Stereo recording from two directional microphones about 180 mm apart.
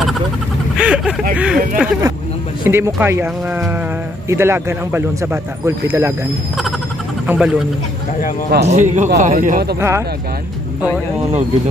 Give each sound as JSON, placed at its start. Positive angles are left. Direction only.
{"t": 0.7, "sound": "vehicle", "side_deg": -5}
{"t": 1.3, "sound": "speech", "side_deg": -5}
{"t": 7.2, "sound": "speech", "side_deg": -5}
{"t": 8.6, "sound": "a man's voice", "side_deg": -40}
{"t": 9.8, "sound": "speech", "side_deg": -15}